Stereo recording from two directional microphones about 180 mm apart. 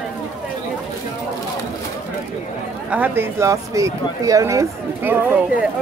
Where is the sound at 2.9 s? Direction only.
10° right (ahead or behind).